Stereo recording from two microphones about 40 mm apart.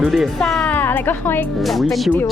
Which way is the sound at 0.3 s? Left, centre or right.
Centre.